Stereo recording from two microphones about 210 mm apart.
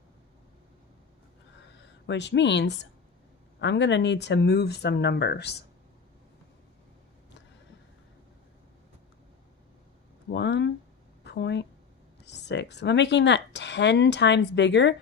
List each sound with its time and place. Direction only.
1.8 s speech: 55° left (ahead or behind)
10.3 s a sound: 55° left (ahead or behind)
12.2 s speech: 55° left (ahead or behind)